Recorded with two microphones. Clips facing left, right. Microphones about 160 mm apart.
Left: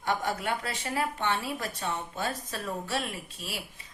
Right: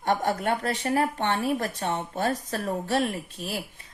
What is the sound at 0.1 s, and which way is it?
A woman's voice, 55° right (ahead or behind).